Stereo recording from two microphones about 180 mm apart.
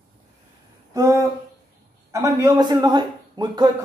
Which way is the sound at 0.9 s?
20° right (ahead or behind).